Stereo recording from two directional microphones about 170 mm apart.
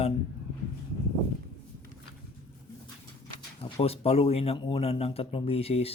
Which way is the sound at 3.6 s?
35° left (ahead or behind).